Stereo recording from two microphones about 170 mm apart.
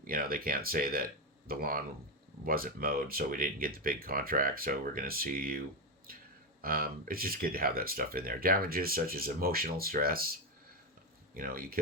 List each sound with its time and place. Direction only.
0.1 s speech: 60° right (ahead or behind)
11.3 s speech: 55° right (ahead or behind)